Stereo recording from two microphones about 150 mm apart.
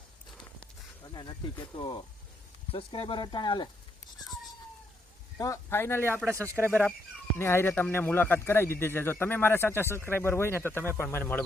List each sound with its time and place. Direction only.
1.0 s speech: 30° left (ahead or behind)
5.4 s a man's voice: 20° left (ahead or behind)
6.3 s speech: 15° right (ahead or behind)
6.7 s a man's voice: 10° left (ahead or behind)